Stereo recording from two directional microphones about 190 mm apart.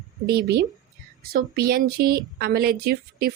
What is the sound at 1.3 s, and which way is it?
A woman's voice, 50° right (ahead or behind).